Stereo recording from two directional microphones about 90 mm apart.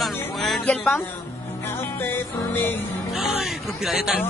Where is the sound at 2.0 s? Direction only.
25° left (ahead or behind).